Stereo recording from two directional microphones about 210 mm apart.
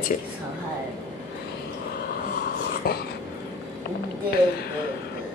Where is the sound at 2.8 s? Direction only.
45° left (ahead or behind).